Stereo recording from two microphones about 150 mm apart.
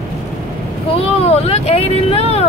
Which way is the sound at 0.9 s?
45° left (ahead or behind).